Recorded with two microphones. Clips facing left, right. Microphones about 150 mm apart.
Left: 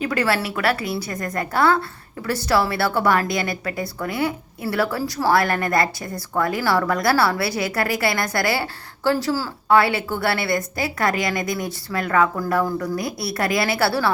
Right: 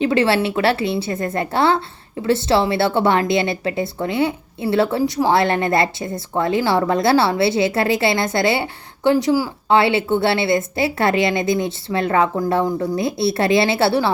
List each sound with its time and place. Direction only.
0.0 s a woman's voice: 25° right (ahead or behind)